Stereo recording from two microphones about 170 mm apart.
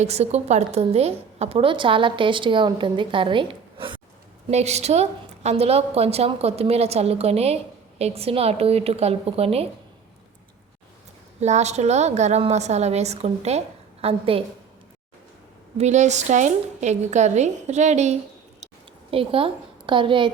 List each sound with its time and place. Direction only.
0.0 s a woman's voice: 40° right (ahead or behind)
11.3 s a woman's voice: 40° right (ahead or behind)
15.8 s a woman's voice: 45° right (ahead or behind)